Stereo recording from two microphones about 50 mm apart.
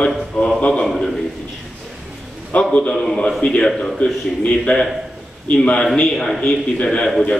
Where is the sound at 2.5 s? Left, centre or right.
Left.